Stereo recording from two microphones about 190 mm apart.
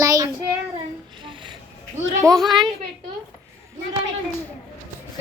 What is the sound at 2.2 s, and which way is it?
Speech, 20° right (ahead or behind).